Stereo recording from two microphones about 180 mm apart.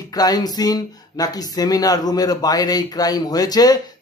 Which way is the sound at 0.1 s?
20° left (ahead or behind).